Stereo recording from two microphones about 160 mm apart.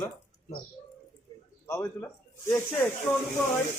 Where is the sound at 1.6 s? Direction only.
15° left (ahead or behind).